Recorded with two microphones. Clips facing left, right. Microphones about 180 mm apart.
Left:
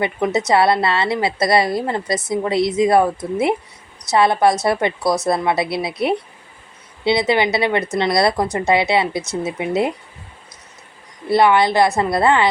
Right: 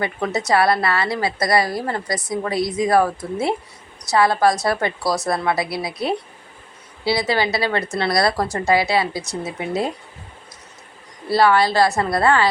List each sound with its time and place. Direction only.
0.3 s a woman's voice: 20° left (ahead or behind)
4.1 s a woman's voice: 25° left (ahead or behind)
11.3 s a woman's voice: 20° left (ahead or behind)